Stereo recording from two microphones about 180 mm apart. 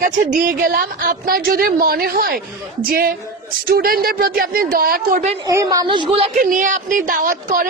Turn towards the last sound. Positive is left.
turn(degrees=-50)  # may be behind; listen again after turning